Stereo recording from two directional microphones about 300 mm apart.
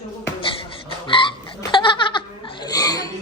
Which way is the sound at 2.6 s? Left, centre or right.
Centre.